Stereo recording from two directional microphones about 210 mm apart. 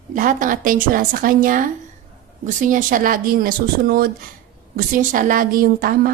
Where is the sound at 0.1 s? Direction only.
40° right (ahead or behind).